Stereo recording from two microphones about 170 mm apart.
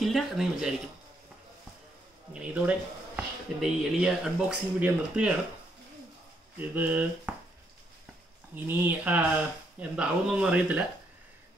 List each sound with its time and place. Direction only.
0.0 s speech: centre (ahead or behind)
2.3 s speech: 10° right (ahead or behind)
6.6 s speech: 10° right (ahead or behind)
8.5 s speech: 10° right (ahead or behind)